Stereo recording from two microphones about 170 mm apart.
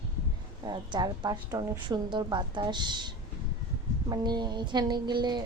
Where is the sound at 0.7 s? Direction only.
25° right (ahead or behind).